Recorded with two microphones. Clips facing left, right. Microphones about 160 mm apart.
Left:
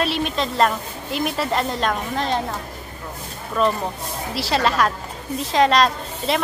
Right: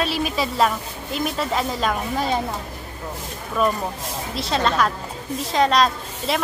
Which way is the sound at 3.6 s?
5° right (ahead or behind).